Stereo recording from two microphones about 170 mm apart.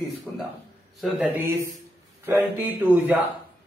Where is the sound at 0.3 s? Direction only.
5° left (ahead or behind).